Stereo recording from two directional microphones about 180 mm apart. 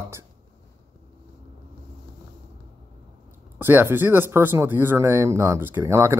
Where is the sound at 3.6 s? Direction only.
10° right (ahead or behind).